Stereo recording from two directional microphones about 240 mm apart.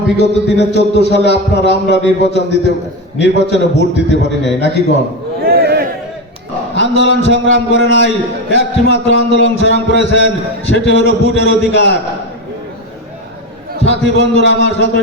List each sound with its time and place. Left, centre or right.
0.2 s a man's voice: left
5.4 s a sound: right
6.7 s a man's voice: left
13.7 s a man's voice: left